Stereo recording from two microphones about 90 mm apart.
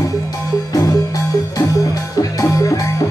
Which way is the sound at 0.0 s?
40° left (ahead or behind).